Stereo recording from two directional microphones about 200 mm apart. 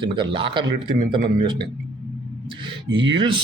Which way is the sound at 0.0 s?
25° right (ahead or behind).